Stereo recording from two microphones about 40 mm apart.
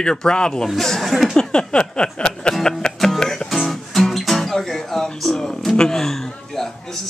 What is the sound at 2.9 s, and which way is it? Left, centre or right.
Music, centre.